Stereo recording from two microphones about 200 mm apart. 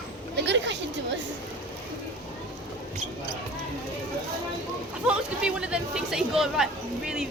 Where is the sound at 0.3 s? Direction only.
60° right (ahead or behind).